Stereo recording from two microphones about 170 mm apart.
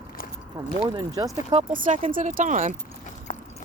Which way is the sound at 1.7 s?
50° right (ahead or behind).